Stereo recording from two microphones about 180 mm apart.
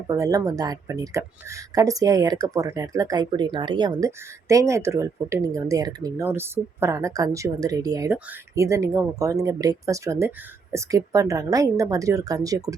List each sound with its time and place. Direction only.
0.1 s speech: 20° right (ahead or behind)